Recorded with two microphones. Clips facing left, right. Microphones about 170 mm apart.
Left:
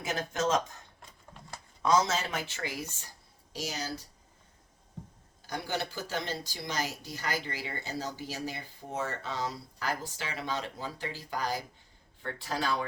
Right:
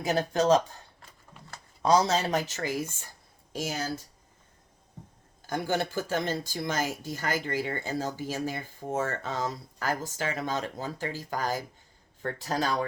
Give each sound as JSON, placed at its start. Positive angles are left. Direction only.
{"t": 0.0, "sound": "speech", "side_deg": -35}
{"t": 1.8, "sound": "speech", "side_deg": -35}
{"t": 5.5, "sound": "speech", "side_deg": -50}